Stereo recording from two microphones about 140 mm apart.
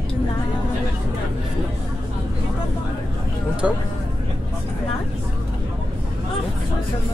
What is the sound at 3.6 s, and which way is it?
Speech, 10° right (ahead or behind).